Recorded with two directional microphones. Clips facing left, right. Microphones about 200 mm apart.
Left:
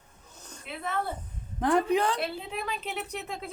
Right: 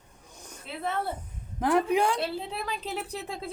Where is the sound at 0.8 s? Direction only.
30° right (ahead or behind).